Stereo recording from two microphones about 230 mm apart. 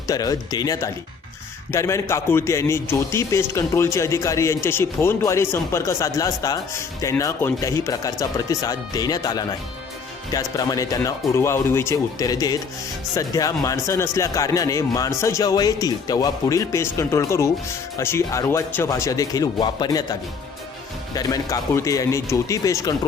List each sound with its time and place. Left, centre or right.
0.1 s a man's voice: centre
21.2 s a man's voice: centre